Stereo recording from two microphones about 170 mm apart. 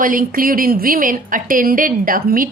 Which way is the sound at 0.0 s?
55° right (ahead or behind).